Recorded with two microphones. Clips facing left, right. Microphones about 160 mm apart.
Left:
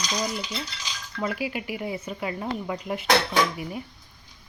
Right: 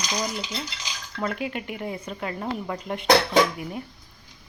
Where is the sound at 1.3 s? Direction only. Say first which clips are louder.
Even; 5° left (ahead or behind).